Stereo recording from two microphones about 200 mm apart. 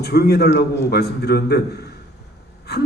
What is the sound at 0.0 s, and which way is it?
A man's voice, 55° left (ahead or behind).